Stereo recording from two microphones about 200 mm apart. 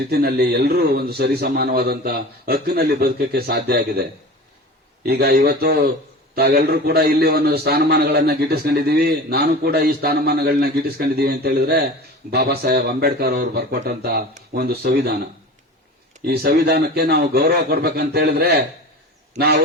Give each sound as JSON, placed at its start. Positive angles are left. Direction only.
{"t": 0.0, "sound": "a man's voice", "side_deg": -50}
{"t": 16.2, "sound": "a man's voice", "side_deg": -55}